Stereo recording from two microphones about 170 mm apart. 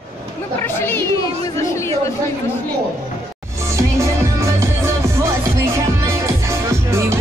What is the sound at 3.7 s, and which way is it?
Music, 15° right (ahead or behind).